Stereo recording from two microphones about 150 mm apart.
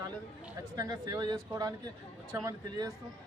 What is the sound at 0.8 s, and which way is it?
A man's voice, 25° right (ahead or behind).